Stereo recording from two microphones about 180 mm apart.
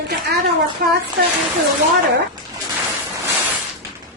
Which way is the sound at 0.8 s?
55° right (ahead or behind).